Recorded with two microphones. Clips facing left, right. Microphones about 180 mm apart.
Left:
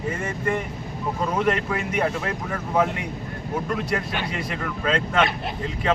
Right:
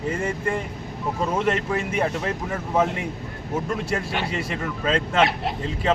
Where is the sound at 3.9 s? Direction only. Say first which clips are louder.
Right 1 dB; 25° right (ahead or behind).